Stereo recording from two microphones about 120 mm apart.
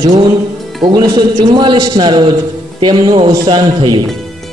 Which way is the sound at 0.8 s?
35° right (ahead or behind).